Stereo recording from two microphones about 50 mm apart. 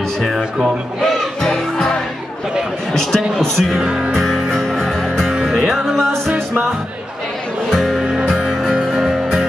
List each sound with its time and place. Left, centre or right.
0.2 s speech: centre
1.0 s music: centre
2.9 s a man's voice: centre
3.8 s music: centre
4.1 s music: centre
7.7 s music: centre